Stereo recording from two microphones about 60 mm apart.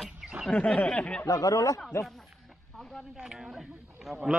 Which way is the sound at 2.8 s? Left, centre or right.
Centre.